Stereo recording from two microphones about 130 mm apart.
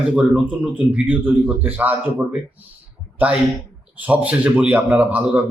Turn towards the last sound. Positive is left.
turn(degrees=-10)  # may be behind; listen again after turning